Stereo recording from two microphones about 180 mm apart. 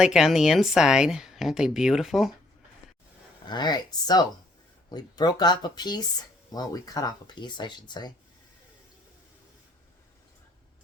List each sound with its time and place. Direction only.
0.0 s speech: 5° right (ahead or behind)
3.5 s speech: 25° left (ahead or behind)